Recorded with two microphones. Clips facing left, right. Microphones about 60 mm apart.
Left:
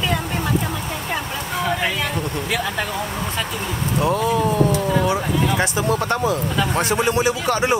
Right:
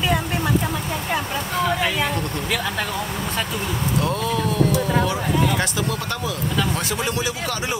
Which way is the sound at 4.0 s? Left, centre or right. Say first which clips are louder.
Left 6 dB; centre.